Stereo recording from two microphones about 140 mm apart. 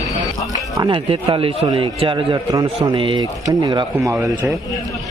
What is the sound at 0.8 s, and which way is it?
A man's voice, 35° right (ahead or behind).